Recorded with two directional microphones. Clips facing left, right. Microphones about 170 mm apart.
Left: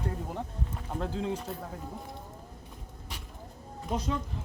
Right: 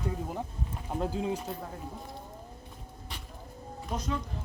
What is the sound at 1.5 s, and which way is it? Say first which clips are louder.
Speech: even; centre (ahead or behind).